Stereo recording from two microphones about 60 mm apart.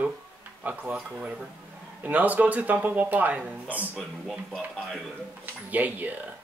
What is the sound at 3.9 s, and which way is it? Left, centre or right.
Speech, centre.